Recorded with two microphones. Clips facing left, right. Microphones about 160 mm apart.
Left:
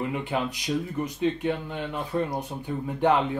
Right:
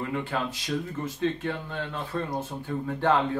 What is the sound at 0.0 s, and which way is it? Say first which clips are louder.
A man's voice: left 2 dB; 20° left (ahead or behind).